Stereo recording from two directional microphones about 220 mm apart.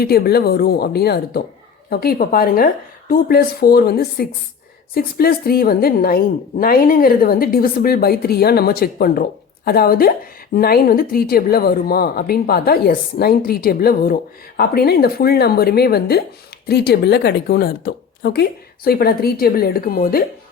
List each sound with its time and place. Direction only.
0.0 s a woman's voice: 45° left (ahead or behind)